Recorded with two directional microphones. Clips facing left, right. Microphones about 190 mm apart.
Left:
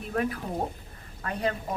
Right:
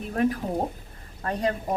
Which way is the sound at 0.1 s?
40° right (ahead or behind).